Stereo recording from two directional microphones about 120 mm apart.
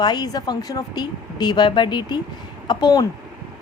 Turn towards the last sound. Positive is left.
turn(degrees=35)  # may be behind; listen again after turning